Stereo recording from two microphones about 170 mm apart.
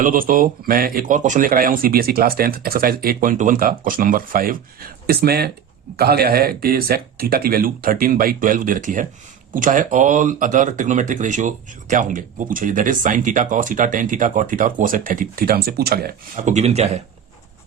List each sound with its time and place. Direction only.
0.0 s speech: 55° right (ahead or behind); by 17.0 s 40° right (ahead or behind)